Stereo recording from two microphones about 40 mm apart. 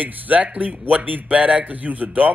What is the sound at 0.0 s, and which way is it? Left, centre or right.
A man's voice, right.